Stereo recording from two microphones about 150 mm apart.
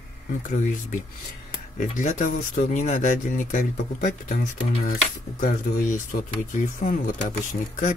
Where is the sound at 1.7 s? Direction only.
60° left (ahead or behind).